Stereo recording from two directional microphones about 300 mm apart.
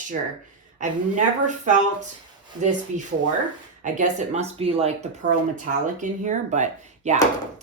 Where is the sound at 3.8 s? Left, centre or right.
Right.